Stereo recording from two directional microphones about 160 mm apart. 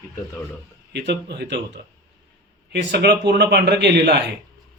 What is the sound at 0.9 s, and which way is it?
Speech, 90° right.